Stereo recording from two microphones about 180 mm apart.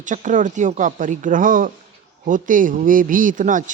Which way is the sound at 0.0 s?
45° right (ahead or behind).